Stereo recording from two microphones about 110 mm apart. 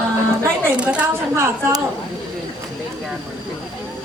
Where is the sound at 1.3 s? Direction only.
30° right (ahead or behind).